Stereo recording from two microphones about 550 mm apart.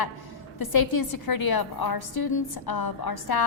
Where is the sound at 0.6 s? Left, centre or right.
Left.